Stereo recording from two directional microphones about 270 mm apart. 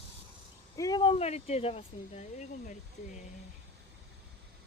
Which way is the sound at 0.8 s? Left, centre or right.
Centre.